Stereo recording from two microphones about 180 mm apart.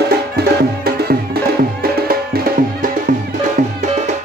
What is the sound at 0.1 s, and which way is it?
Music, 60° right (ahead or behind).